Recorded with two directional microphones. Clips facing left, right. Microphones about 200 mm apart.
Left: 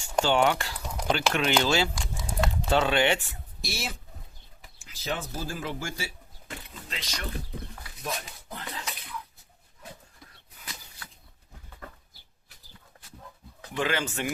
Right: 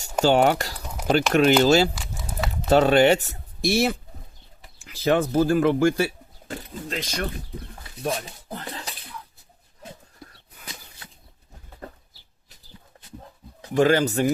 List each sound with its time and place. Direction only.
0.0 s speech: 40° right (ahead or behind); by 6.1 s 60° right (ahead or behind)
6.5 s speech: 50° right (ahead or behind)
8.0 s dishes: 30° right (ahead or behind)
11.0 s a sound: 20° right (ahead or behind)
13.6 s speech: 40° right (ahead or behind)